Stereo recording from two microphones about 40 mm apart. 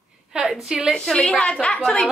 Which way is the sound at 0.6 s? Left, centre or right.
Centre.